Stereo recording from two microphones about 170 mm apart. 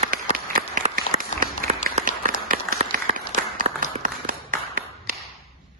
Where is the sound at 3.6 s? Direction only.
40° right (ahead or behind).